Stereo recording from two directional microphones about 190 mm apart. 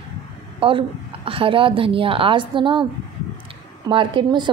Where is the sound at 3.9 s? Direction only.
25° right (ahead or behind).